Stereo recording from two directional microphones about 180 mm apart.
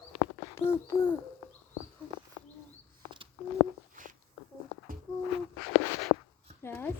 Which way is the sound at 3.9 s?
50° right (ahead or behind).